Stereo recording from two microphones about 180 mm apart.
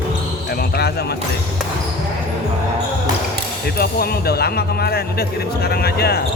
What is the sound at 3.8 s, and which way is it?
Speech, 60° left (ahead or behind).